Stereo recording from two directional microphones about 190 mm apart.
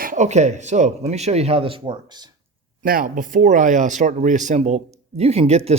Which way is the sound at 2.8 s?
45° right (ahead or behind).